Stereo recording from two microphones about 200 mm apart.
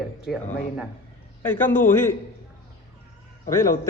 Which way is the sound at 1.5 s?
10° left (ahead or behind).